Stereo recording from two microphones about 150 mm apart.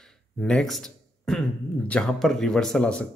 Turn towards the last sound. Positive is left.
turn(degrees=5)  # may be behind; listen again after turning